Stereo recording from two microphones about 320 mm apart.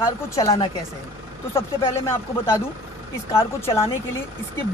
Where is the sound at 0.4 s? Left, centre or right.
Centre.